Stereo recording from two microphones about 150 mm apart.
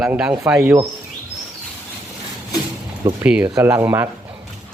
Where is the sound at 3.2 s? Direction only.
10° right (ahead or behind).